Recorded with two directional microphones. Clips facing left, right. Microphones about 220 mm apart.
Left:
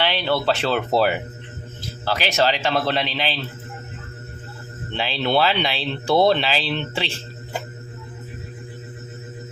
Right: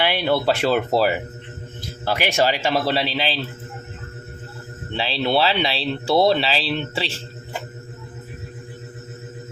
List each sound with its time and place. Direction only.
0.0 s speech: 10° right (ahead or behind)
2.0 s speech: 15° right (ahead or behind)
5.2 s speech: 5° right (ahead or behind)